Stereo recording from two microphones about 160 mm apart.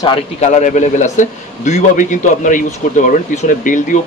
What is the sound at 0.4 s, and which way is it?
Speech, 45° left (ahead or behind).